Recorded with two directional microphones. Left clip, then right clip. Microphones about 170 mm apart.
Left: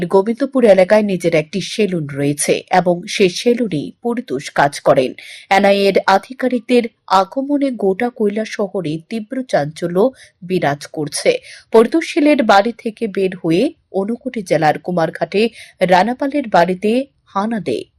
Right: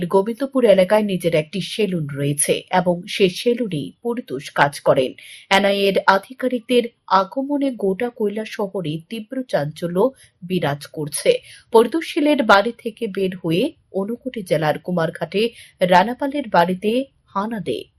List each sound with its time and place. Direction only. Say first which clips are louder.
0.0 s speech: left 4 dB; 25° left (ahead or behind)